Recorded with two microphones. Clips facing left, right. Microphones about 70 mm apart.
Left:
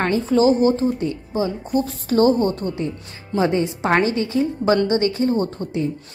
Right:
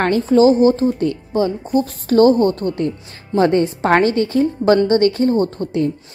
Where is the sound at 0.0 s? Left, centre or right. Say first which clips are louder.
Right 4 dB; right.